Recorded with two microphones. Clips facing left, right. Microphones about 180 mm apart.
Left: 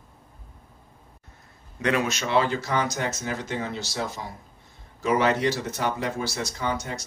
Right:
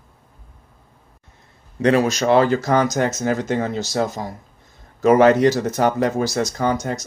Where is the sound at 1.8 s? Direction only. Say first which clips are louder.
Right 9 dB; 35° right (ahead or behind).